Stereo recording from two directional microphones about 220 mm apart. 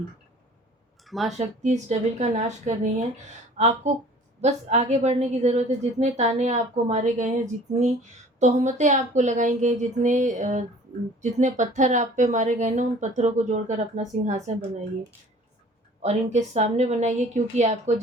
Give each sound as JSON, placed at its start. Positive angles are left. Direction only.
{"t": 1.0, "sound": "speech", "side_deg": 0}
{"t": 1.4, "sound": "a woman's voice", "side_deg": -30}
{"t": 16.0, "sound": "a woman's voice", "side_deg": -30}